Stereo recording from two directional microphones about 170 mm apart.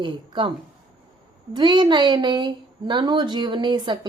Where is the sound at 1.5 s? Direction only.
25° right (ahead or behind).